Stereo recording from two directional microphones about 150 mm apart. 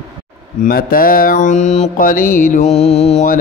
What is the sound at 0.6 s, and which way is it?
Mantra, 75° left (ahead or behind).